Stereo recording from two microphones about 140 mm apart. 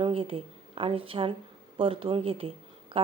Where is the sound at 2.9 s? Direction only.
40° right (ahead or behind).